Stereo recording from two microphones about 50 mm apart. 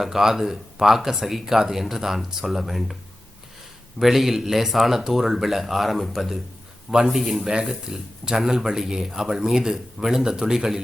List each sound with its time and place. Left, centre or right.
0.0 s speech: centre
4.0 s speech: centre
7.5 s speech: centre